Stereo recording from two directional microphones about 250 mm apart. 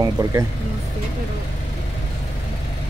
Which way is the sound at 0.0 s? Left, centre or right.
Centre.